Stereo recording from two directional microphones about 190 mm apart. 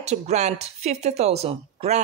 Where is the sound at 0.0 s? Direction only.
35° right (ahead or behind).